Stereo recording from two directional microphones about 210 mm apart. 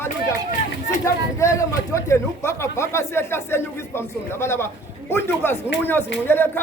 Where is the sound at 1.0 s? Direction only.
15° left (ahead or behind).